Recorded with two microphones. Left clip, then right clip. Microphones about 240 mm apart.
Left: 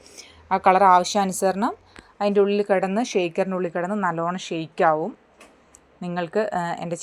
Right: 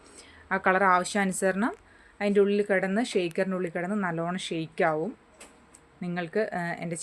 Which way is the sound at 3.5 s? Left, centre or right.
Centre.